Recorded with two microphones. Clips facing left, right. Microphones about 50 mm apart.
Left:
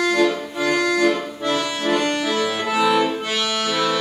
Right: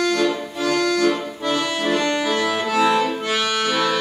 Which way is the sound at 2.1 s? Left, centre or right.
Centre.